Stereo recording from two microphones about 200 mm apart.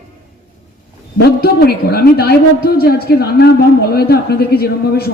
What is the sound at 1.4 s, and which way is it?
A woman's voice, 50° left (ahead or behind).